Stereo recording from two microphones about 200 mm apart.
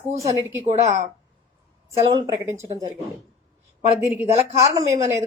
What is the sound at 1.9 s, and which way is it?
Speech, 25° right (ahead or behind).